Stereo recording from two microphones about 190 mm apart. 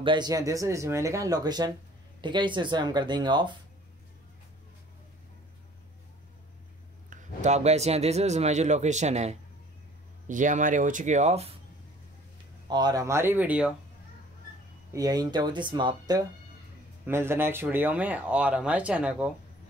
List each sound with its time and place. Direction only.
0.0 s speech: 25° right (ahead or behind)
7.1 s a man's voice: 35° right (ahead or behind)
12.6 s speech: 20° right (ahead or behind)
14.9 s speech: 20° right (ahead or behind)